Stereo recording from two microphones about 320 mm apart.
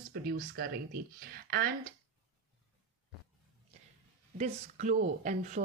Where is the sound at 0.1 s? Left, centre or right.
Right.